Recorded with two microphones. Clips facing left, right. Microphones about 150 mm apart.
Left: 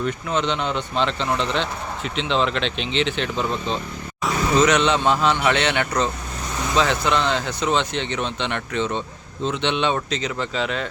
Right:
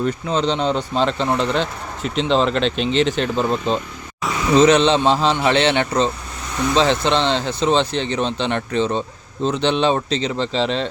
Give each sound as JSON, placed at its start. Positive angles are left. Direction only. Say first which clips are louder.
{"t": 0.0, "sound": "speech", "louder": "right 3 dB", "side_deg": -35}